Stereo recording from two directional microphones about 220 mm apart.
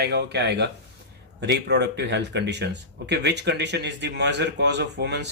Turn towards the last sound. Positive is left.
turn(degrees=-50)  # may be behind; listen again after turning